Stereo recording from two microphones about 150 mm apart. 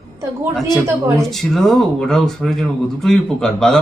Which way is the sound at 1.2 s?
Centre (ahead or behind).